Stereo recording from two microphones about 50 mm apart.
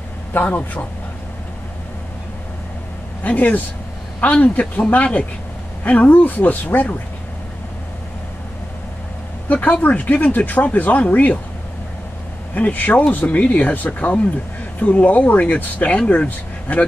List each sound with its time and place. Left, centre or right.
0.4 s speech: left
3.3 s speech: left
9.5 s speech: left
12.5 s speech: left